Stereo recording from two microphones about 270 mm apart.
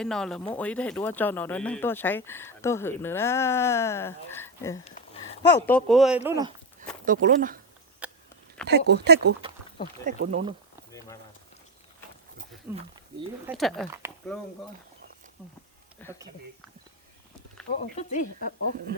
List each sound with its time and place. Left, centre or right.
0.0 s speech: centre
5.4 s speech: left
5.6 s speech: centre
7.0 s speech: right
8.0 s a sound: centre
8.6 s speech: right
10.1 s speech: right
12.7 s speech: centre
16.0 s speech: centre
17.7 s speech: left